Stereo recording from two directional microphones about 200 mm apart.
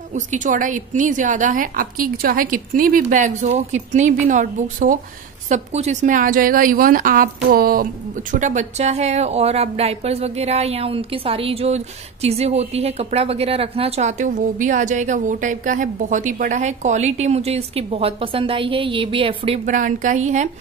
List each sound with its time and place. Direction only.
0.1 s a woman's voice: 40° right (ahead or behind)